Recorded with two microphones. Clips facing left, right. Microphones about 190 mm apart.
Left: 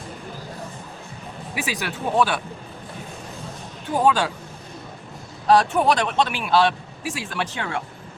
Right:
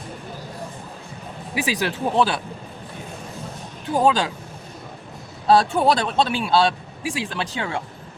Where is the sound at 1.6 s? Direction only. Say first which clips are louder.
Right 4 dB; 30° right (ahead or behind).